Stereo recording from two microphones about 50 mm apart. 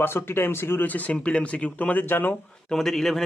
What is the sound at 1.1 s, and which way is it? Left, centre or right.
Speech, left.